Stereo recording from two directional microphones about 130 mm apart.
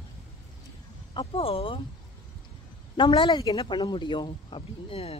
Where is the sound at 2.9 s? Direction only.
35° left (ahead or behind).